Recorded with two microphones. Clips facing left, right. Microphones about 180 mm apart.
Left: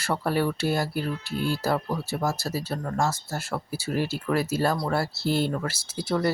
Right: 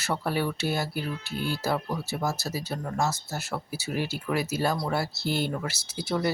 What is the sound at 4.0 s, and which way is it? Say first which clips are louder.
Speech: left 3 dB; 35° left (ahead or behind).